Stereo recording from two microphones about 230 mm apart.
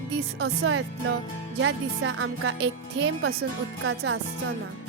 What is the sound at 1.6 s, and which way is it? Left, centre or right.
Speech, right.